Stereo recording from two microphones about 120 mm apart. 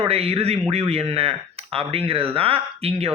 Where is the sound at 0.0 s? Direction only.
55° right (ahead or behind).